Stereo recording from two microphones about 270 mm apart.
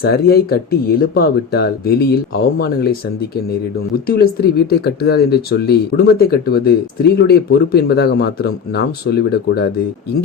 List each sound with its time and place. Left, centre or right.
0.0 s speech: left
4.0 s speech: left